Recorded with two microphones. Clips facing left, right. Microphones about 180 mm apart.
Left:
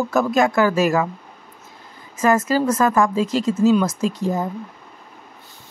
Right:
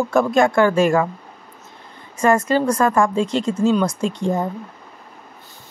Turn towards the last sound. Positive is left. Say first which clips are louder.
# right 1 dB
turn(degrees=5)  # may be behind; listen again after turning